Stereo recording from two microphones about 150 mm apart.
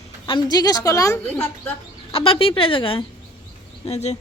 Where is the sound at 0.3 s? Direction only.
30° left (ahead or behind).